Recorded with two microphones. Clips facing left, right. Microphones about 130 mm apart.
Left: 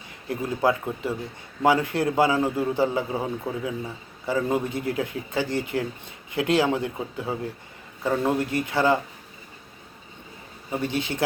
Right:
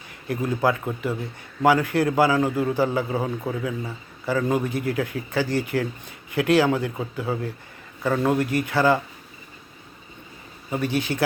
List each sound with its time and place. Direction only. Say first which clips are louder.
0.3 s a man's voice: right 1 dB; 25° left (ahead or behind)
10.7 s a man's voice: right 2 dB; 25° left (ahead or behind)